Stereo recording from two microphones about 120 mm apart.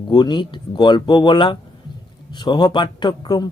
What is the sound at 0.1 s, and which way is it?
Speech, 40° left (ahead or behind).